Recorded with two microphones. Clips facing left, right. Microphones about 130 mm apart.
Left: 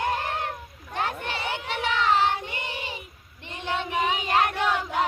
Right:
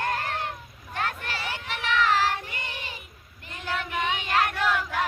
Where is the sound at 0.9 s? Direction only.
30° left (ahead or behind).